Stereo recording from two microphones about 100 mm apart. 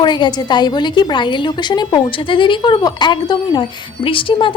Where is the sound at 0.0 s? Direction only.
50° left (ahead or behind).